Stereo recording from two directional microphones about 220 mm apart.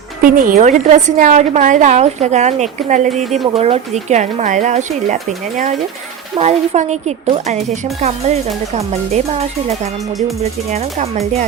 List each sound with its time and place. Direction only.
0.2 s a woman's voice: 40° right (ahead or behind)
10.7 s speech: 30° right (ahead or behind)